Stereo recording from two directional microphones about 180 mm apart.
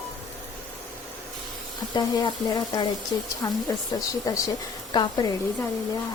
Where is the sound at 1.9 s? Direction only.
25° left (ahead or behind).